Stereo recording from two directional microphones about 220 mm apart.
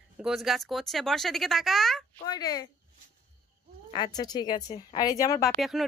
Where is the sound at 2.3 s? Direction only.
15° left (ahead or behind).